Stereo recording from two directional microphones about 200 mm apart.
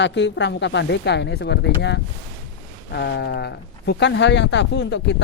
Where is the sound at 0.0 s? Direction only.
60° left (ahead or behind).